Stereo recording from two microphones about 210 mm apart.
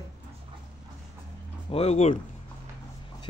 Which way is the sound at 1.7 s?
30° left (ahead or behind).